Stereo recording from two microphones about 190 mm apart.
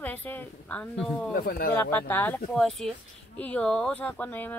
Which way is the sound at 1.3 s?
50° left (ahead or behind).